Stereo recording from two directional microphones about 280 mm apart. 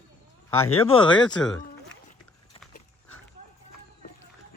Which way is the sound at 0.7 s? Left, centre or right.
Centre.